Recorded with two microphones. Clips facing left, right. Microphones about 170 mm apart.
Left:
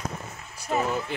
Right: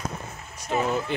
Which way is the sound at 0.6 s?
5° left (ahead or behind).